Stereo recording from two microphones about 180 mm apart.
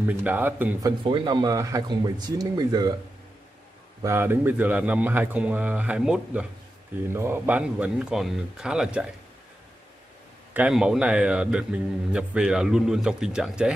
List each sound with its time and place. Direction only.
0.0 s a man's voice: 10° right (ahead or behind)
1.0 s speech: 25° right (ahead or behind)
4.0 s a man's voice: 15° right (ahead or behind)
10.5 s a man's voice: 5° right (ahead or behind)